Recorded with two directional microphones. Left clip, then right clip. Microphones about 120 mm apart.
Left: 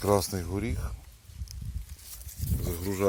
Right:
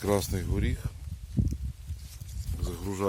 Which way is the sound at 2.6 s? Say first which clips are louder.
Left 2 dB; 10° left (ahead or behind).